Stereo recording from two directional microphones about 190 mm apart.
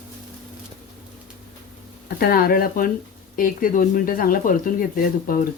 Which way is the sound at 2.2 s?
55° left (ahead or behind).